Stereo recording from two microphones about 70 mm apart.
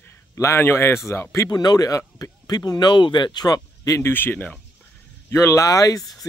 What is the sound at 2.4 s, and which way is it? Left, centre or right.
Speech, left.